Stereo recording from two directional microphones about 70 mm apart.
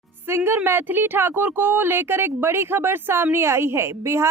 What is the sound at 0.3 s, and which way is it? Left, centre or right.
A woman's voice, right.